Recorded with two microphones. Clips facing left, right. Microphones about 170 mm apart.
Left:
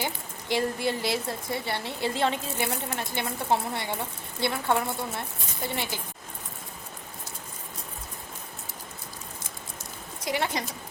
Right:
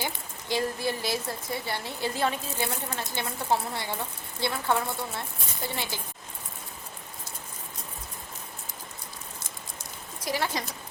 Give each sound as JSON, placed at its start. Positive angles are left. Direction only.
{"t": 0.0, "sound": "speech", "side_deg": 20}
{"t": 10.2, "sound": "speech", "side_deg": 20}